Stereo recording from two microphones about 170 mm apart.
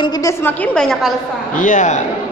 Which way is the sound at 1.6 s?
45° left (ahead or behind).